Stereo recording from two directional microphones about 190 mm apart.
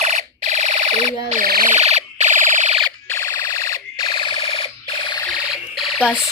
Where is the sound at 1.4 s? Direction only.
50° right (ahead or behind).